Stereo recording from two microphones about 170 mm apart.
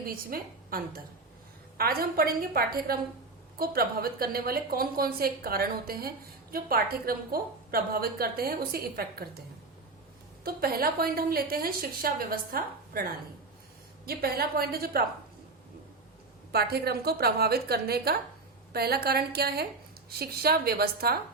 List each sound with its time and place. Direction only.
0.0 s a woman's voice: 60° right (ahead or behind)
10.4 s a woman's voice: 60° right (ahead or behind)
14.0 s a woman's voice: 60° right (ahead or behind)
16.5 s a woman's voice: 65° right (ahead or behind)